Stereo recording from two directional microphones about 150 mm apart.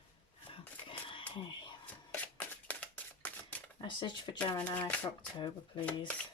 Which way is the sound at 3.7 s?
30° left (ahead or behind).